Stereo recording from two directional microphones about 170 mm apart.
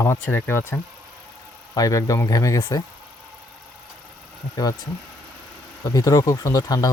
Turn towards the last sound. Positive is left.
turn(degrees=20)  # may be behind; listen again after turning